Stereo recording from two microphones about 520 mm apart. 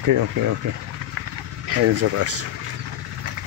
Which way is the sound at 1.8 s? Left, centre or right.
Right.